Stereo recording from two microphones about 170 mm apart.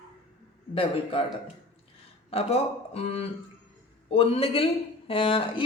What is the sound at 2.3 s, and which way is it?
Speech, 35° left (ahead or behind).